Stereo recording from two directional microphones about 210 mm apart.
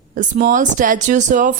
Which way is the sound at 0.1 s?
40° right (ahead or behind).